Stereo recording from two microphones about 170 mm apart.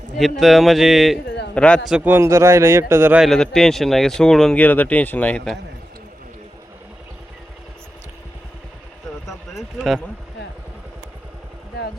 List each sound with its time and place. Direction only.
0.2 s a man's voice: centre (ahead or behind)
2.0 s speech: 10° right (ahead or behind); by 5.5 s 10° left (ahead or behind)
9.2 s a sound: centre (ahead or behind)